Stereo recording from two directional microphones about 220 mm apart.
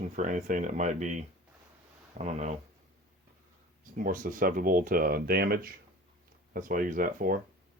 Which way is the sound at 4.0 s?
40° right (ahead or behind).